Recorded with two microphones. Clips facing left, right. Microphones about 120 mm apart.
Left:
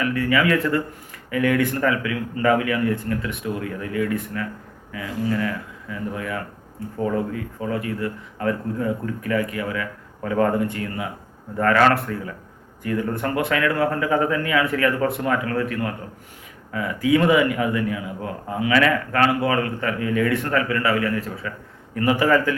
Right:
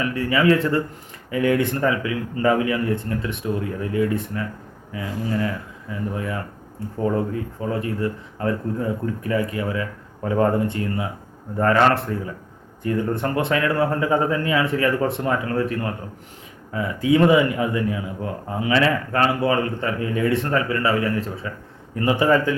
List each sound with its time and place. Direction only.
0.0 s speech: 25° right (ahead or behind)
7.7 s speech: 30° right (ahead or behind)